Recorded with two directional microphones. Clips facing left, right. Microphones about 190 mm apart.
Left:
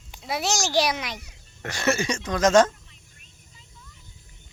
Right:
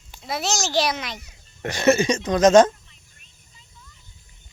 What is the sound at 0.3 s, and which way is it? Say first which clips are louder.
A child's voice: even; 10° left (ahead or behind).